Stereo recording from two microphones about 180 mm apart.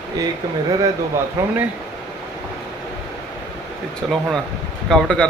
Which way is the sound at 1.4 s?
15° right (ahead or behind).